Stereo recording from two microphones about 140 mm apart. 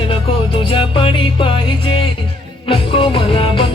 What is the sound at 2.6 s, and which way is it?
Music, 40° left (ahead or behind).